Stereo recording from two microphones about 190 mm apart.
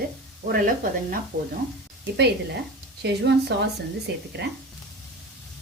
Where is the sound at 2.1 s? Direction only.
60° right (ahead or behind).